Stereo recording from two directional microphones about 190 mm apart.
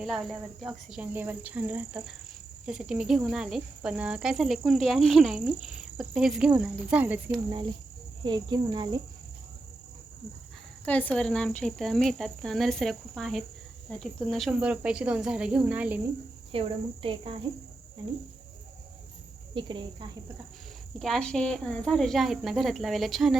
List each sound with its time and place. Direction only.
0.0 s speech: centre (ahead or behind)
8.2 s speech: 25° right (ahead or behind)
10.8 s speech: 10° left (ahead or behind); by 16.0 s 10° right (ahead or behind)
16.5 s speech: 30° right (ahead or behind)
19.5 s speech: 25° right (ahead or behind)
21.0 s speech: centre (ahead or behind)